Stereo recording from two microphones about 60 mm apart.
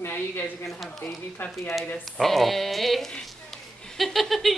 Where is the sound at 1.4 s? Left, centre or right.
Left.